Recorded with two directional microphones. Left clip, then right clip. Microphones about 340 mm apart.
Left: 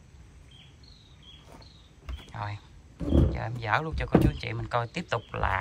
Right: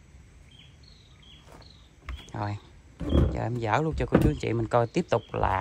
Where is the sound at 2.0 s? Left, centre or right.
Centre.